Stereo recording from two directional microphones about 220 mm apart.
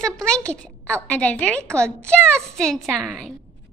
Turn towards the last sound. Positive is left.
turn(degrees=0)  # may be behind; listen again after turning